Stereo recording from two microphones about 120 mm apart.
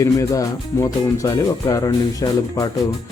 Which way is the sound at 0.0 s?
30° left (ahead or behind).